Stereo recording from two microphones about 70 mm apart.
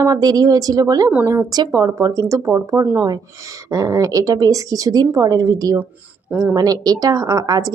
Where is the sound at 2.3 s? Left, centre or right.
Right.